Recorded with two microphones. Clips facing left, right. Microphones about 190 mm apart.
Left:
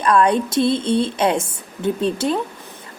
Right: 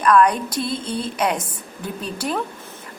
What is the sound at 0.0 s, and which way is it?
Speech, 25° left (ahead or behind).